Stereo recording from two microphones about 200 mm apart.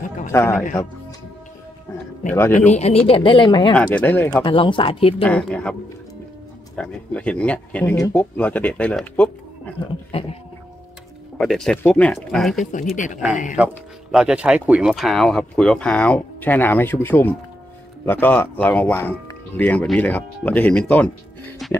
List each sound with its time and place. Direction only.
0.3 s speech: 10° left (ahead or behind)
2.5 s speech: 35° left (ahead or behind)
3.7 s speech: 10° left (ahead or behind)
4.3 s speech: 25° left (ahead or behind)
5.2 s speech: 5° left (ahead or behind)
6.8 s speech: 5° left (ahead or behind)
11.3 s speech: centre (ahead or behind)
12.9 s speech: 40° left (ahead or behind)
13.6 s speech: 5° right (ahead or behind)